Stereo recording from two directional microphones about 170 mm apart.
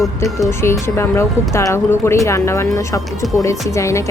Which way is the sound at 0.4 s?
15° left (ahead or behind).